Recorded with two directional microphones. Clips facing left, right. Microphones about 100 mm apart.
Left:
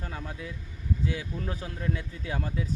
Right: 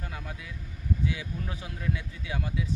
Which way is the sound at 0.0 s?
30° left (ahead or behind).